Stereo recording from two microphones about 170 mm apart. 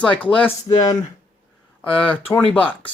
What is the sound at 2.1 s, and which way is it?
Speech, 10° left (ahead or behind).